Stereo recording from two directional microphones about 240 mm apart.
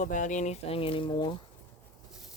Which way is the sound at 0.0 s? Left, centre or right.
Left.